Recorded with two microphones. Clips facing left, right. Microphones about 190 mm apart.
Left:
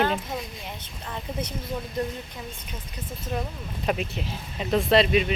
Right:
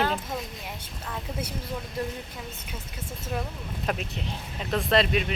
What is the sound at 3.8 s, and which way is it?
Speech, 5° left (ahead or behind).